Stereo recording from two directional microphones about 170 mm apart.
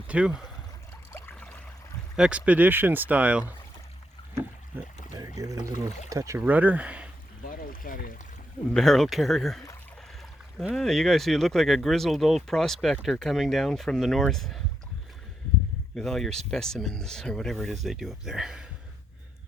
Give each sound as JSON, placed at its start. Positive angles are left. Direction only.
{"t": 0.1, "sound": "speech", "side_deg": -5}
{"t": 1.1, "sound": "a sound", "side_deg": 10}
{"t": 2.1, "sound": "speech", "side_deg": -5}
{"t": 5.1, "sound": "speech", "side_deg": -20}
{"t": 7.4, "sound": "boat", "side_deg": 55}
{"t": 8.7, "sound": "speech", "side_deg": 0}
{"t": 10.6, "sound": "speech", "side_deg": 0}
{"t": 16.0, "sound": "speech", "side_deg": 0}